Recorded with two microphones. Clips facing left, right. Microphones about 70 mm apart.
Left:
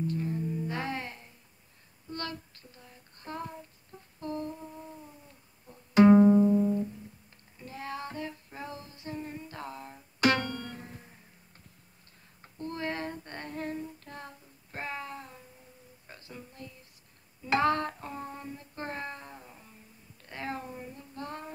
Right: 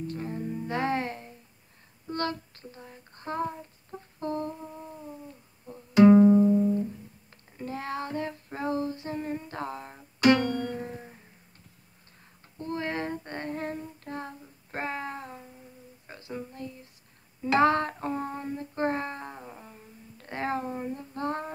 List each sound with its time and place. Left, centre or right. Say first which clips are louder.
0.0 s music: left 1 dB; right
2.0 s child singing: right 7 dB; right
4.2 s humming: right 4 dB; right
6.0 s music: right 3 dB; centre
7.6 s child singing: right 5 dB; right
9.0 s a sound: right 6 dB; right
10.4 s music: right 8 dB; centre
10.8 s music: right 9 dB; right
12.5 s female singing: right 3 dB; right
14.0 s child singing: right 7 dB; right
16.3 s a sound: right 9 dB; right
17.6 s child singing: right 5 dB; right
20.2 s a sound: right 7 dB; right